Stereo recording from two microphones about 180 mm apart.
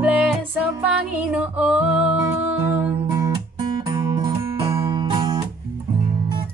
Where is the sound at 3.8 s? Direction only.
20° right (ahead or behind).